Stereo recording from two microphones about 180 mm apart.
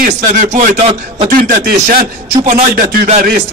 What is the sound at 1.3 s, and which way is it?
A man's voice, 55° right (ahead or behind).